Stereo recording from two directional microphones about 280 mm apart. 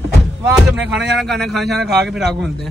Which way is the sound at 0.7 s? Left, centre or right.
Centre.